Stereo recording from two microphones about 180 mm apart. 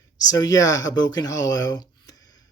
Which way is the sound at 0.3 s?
20° left (ahead or behind).